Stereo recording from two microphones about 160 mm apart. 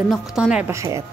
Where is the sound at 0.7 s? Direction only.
20° right (ahead or behind).